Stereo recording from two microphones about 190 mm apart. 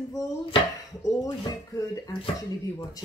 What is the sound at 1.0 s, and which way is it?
Speech, 15° left (ahead or behind).